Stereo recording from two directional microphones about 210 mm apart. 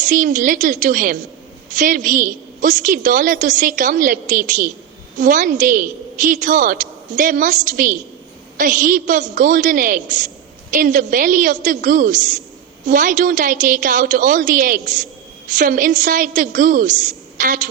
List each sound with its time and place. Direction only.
0.1 s a woman's voice: 40° right (ahead or behind)